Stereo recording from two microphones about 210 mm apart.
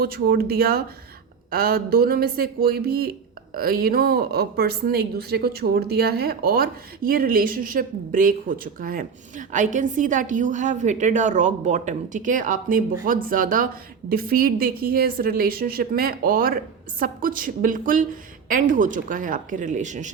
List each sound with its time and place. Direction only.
0.0 s a woman's voice: 45° right (ahead or behind)